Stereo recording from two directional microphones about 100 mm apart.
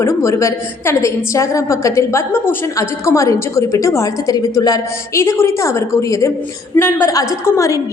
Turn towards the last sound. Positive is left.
turn(degrees=30)  # may be behind; listen again after turning